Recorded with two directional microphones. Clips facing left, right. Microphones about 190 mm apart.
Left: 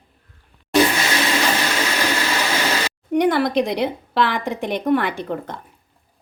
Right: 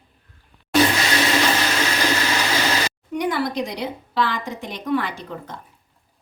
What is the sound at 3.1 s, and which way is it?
A woman's voice, 70° left (ahead or behind).